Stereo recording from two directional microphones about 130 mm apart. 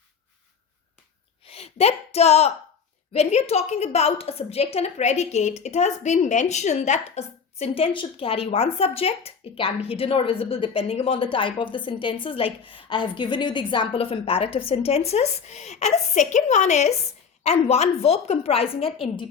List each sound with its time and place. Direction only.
1.5 s a sound: 55° left (ahead or behind)
3.1 s a woman's voice: 55° left (ahead or behind)
7.6 s a woman's voice: 45° left (ahead or behind)